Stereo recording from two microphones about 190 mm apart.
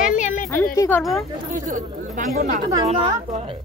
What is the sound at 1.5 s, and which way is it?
A woman's voice, 45° right (ahead or behind).